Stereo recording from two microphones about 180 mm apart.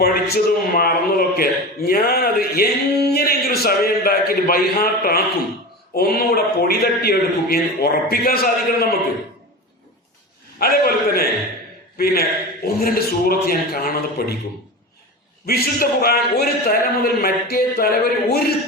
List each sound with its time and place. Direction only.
0.0 s a man's voice: 55° left (ahead or behind)
10.6 s a man's voice: 55° left (ahead or behind)
15.4 s a man's voice: 55° left (ahead or behind)